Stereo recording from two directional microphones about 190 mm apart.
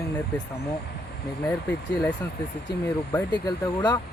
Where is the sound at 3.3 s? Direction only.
20° left (ahead or behind).